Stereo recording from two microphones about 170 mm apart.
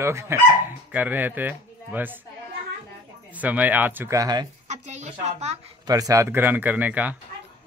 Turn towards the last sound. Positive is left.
turn(degrees=-10)  # may be behind; listen again after turning